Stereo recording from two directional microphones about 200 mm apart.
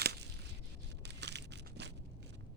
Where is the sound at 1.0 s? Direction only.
60° right (ahead or behind).